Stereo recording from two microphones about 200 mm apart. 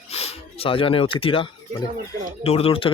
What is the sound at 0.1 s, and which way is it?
Speech, 30° left (ahead or behind).